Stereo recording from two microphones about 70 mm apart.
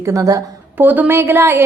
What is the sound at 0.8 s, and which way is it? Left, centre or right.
Speech, right.